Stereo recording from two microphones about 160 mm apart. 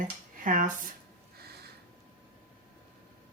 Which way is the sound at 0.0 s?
55° right (ahead or behind).